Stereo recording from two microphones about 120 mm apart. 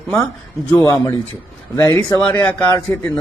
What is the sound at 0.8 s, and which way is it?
A man's voice, 30° left (ahead or behind).